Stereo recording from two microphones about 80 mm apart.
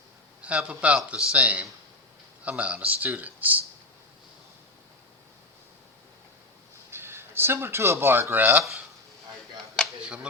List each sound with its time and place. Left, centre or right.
0.4 s a man's voice: centre
6.9 s speech: right